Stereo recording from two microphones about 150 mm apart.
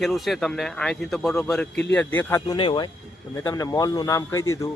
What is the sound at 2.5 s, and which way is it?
A man's voice, 30° left (ahead or behind).